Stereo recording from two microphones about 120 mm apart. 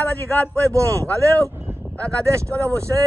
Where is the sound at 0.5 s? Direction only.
25° right (ahead or behind).